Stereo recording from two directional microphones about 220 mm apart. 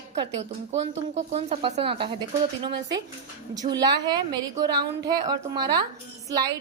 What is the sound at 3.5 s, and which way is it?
A woman's voice, 15° right (ahead or behind).